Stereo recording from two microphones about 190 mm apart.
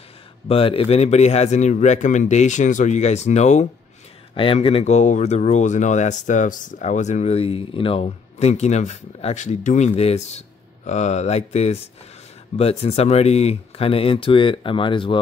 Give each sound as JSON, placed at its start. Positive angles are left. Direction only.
{"t": 0.5, "sound": "speech", "side_deg": 30}